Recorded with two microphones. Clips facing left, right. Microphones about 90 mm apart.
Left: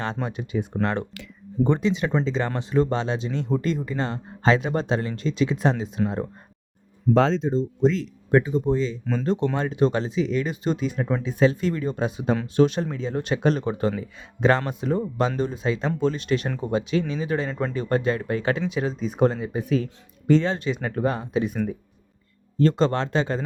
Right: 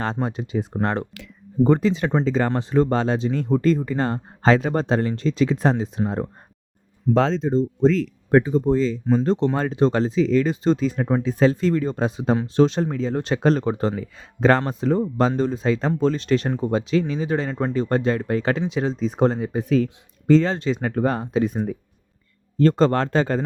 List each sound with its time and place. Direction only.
0.0 s speech: 30° right (ahead or behind)
1.6 s speech: 35° right (ahead or behind)
7.1 s speech: centre (ahead or behind)
8.3 s speech: 40° right (ahead or behind)
22.6 s speech: 40° right (ahead or behind)